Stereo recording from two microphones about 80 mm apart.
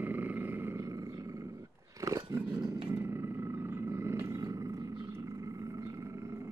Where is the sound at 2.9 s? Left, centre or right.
Right.